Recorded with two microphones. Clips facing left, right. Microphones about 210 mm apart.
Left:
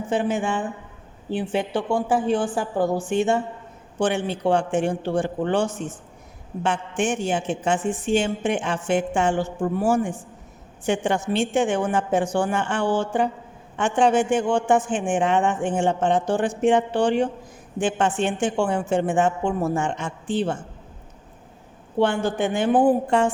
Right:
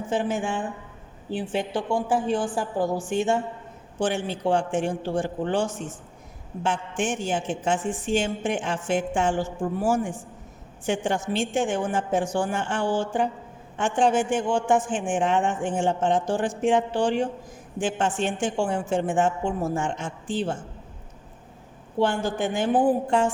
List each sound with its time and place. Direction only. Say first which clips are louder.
0.1 s a woman's voice: left 3 dB; 60° left (ahead or behind)
21.9 s a woman's voice: left 3 dB; 60° left (ahead or behind)